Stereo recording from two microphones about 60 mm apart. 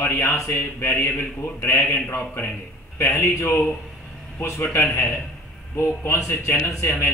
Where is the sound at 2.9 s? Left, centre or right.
Left.